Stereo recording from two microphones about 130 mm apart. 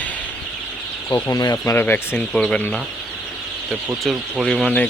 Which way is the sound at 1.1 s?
30° left (ahead or behind).